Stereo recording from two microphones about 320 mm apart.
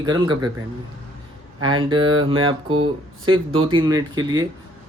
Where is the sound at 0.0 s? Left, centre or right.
Centre.